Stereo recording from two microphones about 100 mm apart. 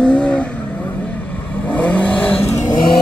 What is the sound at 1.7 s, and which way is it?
Vehicle, 15° left (ahead or behind).